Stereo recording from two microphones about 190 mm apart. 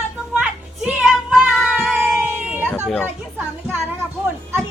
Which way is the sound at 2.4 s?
5° right (ahead or behind).